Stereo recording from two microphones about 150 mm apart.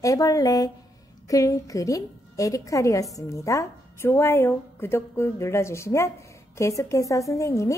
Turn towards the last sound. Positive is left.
turn(degrees=20)  # may be behind; listen again after turning